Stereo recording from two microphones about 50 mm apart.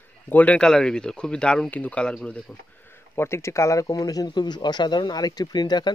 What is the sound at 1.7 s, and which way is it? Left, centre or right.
Speech, left.